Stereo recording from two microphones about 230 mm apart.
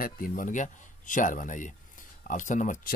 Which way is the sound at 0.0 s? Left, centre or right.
Left.